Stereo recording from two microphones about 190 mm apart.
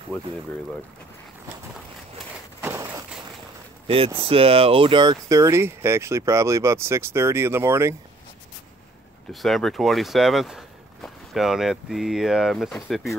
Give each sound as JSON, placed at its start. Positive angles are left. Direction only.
{"t": 2.6, "sound": "a sound", "side_deg": -15}
{"t": 3.8, "sound": "speech", "side_deg": -30}
{"t": 9.3, "sound": "speech", "side_deg": 0}